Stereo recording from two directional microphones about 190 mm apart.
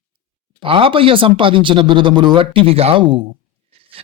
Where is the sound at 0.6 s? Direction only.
30° right (ahead or behind).